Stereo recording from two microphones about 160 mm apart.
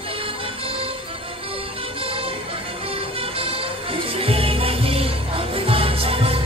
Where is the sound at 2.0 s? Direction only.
35° right (ahead or behind).